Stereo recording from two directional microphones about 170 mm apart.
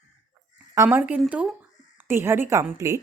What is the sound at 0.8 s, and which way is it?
A woman's voice, 10° right (ahead or behind).